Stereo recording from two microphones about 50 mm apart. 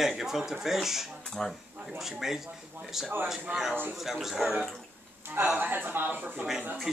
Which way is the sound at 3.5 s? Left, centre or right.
Right.